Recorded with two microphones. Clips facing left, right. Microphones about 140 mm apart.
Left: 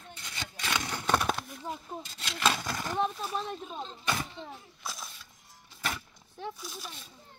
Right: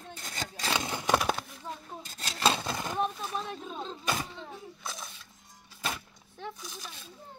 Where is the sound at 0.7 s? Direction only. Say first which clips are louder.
Right 1 dB; 25° right (ahead or behind).